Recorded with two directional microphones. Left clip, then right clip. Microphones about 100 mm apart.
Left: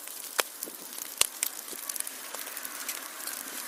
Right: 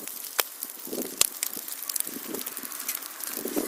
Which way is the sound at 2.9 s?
35° right (ahead or behind).